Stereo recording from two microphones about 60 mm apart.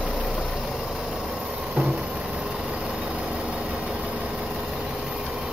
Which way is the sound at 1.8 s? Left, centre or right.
Right.